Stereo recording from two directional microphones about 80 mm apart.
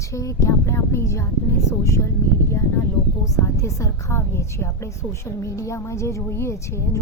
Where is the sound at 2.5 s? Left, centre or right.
Left.